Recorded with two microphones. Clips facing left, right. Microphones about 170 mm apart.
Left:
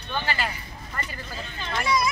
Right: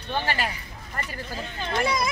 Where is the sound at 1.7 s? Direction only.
50° right (ahead or behind).